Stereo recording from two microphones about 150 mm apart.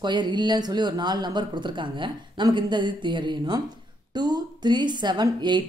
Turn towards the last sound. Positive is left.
turn(degrees=-30)  # may be behind; listen again after turning